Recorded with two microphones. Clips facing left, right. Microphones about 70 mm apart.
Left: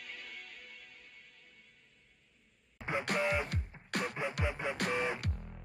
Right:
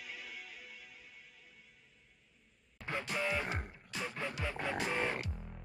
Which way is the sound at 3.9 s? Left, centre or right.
Left.